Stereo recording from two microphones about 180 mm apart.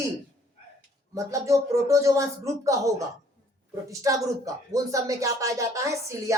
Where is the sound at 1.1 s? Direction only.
15° right (ahead or behind).